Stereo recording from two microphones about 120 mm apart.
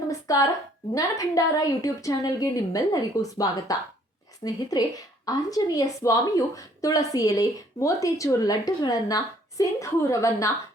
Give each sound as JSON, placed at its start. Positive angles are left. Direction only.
{"t": 0.3, "sound": "a woman's voice", "side_deg": 30}